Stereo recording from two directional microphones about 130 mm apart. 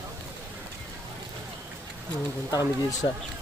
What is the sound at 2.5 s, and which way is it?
Speech, 30° left (ahead or behind).